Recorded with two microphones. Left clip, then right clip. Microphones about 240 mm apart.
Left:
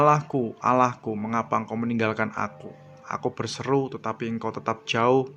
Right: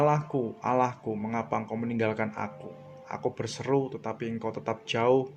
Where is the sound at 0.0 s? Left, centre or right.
Left.